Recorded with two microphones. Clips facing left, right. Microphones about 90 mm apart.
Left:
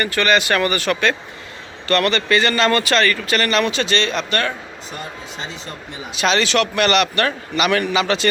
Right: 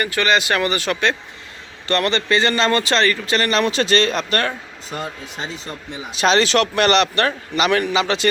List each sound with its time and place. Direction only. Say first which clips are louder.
0.0 s speech: left 1 dB; 15° right (ahead or behind); by 4.5 s 40° right (ahead or behind)
6.1 s a man's voice: right 2 dB; 35° right (ahead or behind); by 8.3 s 20° right (ahead or behind)